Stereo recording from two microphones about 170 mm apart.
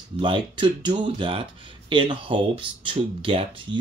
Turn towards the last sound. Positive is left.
turn(degrees=-30)  # may be behind; listen again after turning